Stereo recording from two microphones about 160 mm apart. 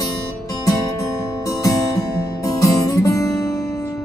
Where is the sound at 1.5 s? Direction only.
20° left (ahead or behind).